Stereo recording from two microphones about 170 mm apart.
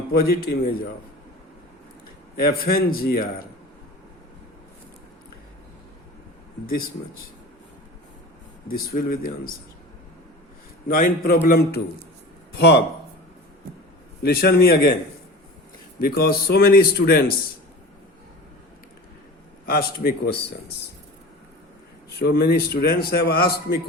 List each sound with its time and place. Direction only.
0.1 s a man's voice: 60° left (ahead or behind)
2.3 s a man's voice: 60° left (ahead or behind)
8.6 s a man's voice: 60° left (ahead or behind)
10.8 s a man's voice: 55° left (ahead or behind)
12.5 s speech: 75° left (ahead or behind)
14.2 s a man's voice: 65° left (ahead or behind)
16.0 s a man's voice: 65° left (ahead or behind)
19.6 s a man's voice: 60° left (ahead or behind)
22.2 s a man's voice: 65° left (ahead or behind)